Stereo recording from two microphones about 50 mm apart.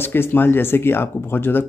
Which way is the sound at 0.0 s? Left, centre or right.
Left.